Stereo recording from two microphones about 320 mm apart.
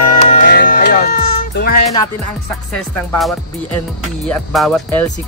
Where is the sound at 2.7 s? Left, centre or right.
Centre.